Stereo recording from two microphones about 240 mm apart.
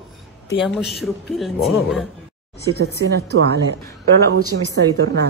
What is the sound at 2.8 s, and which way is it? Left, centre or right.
Speech, right.